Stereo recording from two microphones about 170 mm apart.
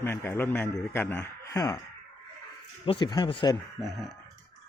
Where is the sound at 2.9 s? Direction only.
25° left (ahead or behind).